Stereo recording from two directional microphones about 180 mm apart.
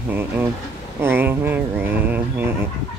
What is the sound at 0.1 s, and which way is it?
Speech, 10° right (ahead or behind).